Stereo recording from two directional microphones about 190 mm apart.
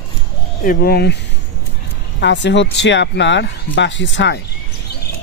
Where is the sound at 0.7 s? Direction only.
55° left (ahead or behind).